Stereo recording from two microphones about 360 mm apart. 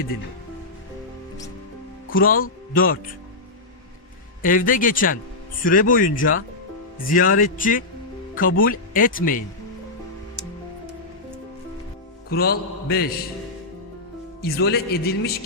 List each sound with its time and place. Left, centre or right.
2.0 s speech: left
4.4 s speech: left
12.3 s speech: left
14.4 s speech: left